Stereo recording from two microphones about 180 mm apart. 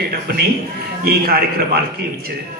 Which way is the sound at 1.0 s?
60° right (ahead or behind).